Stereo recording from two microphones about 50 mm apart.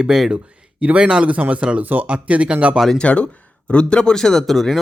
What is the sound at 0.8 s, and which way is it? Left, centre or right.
Speech, right.